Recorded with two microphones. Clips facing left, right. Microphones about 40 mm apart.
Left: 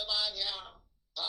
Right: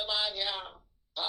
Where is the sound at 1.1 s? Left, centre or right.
Right.